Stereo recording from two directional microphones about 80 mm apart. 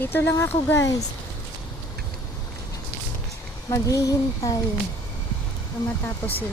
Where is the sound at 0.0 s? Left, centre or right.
Left.